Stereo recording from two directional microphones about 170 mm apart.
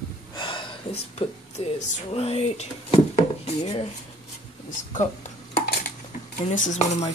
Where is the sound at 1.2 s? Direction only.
35° left (ahead or behind).